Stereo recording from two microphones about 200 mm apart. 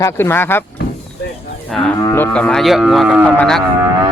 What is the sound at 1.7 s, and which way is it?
Speech, 5° left (ahead or behind).